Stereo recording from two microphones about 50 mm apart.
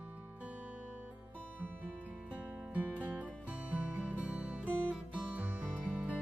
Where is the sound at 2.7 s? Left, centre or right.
Right.